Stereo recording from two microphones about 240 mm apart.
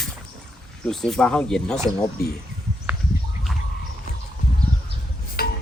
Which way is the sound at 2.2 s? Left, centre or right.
Left.